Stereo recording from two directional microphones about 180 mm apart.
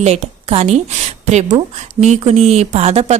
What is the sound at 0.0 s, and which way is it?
A woman's voice, 35° right (ahead or behind).